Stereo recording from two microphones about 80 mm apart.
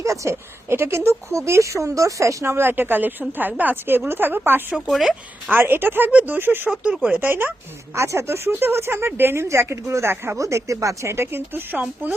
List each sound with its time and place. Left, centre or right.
0.0 s a woman's voice: right
4.9 s speech: centre
5.5 s a woman's voice: right
6.7 s speech: centre
7.9 s speech: right
10.4 s speech: right